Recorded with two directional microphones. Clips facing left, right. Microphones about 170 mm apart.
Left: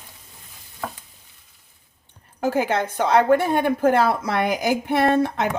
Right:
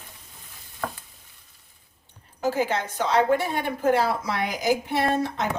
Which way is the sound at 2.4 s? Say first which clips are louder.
Left 3 dB; 55° left (ahead or behind).